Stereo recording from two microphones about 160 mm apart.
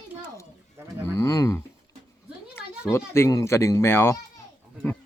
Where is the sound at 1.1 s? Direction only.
20° left (ahead or behind).